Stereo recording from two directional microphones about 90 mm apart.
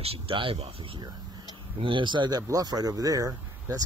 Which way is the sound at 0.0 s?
85° right.